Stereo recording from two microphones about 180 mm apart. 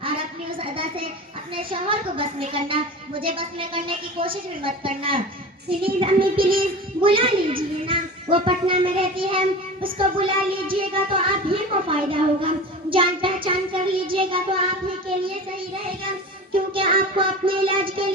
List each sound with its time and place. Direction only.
0.6 s a sound: 30° right (ahead or behind)
1.5 s a child's voice: 30° right (ahead or behind)
7.9 s child singing: 30° right (ahead or behind)
16.7 s a woman's voice: 30° right (ahead or behind)